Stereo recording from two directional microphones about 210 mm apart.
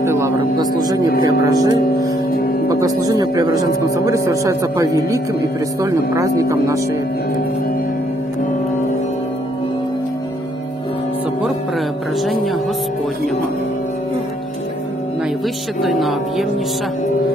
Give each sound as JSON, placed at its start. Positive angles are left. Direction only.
{"t": 0.0, "sound": "a sound", "side_deg": -15}
{"t": 1.4, "sound": "speech", "side_deg": -15}
{"t": 12.2, "sound": "music", "side_deg": 0}
{"t": 15.8, "sound": "speech", "side_deg": 0}